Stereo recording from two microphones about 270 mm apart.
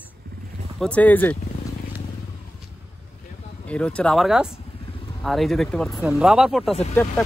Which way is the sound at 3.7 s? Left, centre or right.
Centre.